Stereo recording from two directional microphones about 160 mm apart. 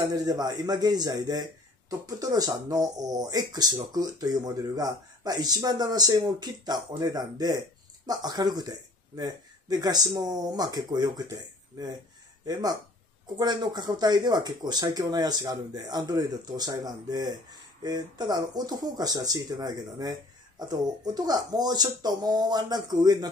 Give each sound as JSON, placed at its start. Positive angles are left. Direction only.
{"t": 0.1, "sound": "speech", "side_deg": -25}
{"t": 13.4, "sound": "speech", "side_deg": -25}